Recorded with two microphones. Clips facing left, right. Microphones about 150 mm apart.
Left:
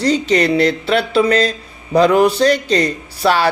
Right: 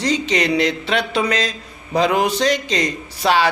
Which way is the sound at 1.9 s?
60° left (ahead or behind).